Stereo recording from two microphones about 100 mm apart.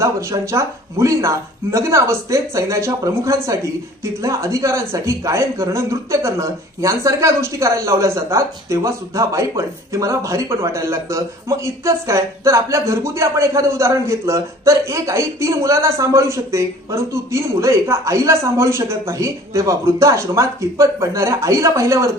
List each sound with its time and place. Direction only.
0.0 s speech: 30° right (ahead or behind)